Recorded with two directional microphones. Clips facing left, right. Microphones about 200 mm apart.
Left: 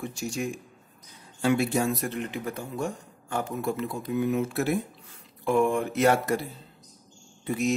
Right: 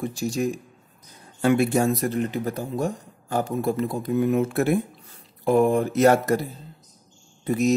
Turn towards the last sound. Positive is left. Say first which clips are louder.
# right 5 dB
turn(degrees=-40)  # may be behind; listen again after turning